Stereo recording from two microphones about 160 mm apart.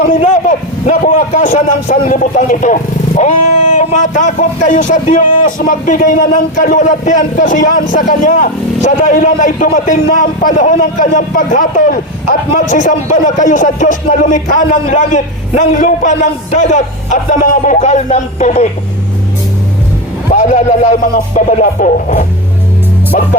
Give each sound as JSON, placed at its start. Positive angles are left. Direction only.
{"t": 0.2, "sound": "speech", "side_deg": 50}
{"t": 20.3, "sound": "speech", "side_deg": 50}